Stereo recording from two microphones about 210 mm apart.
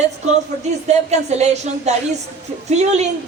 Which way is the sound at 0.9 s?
30° right (ahead or behind).